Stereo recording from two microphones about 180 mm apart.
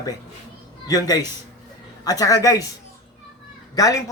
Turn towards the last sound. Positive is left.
turn(degrees=20)  # may be behind; listen again after turning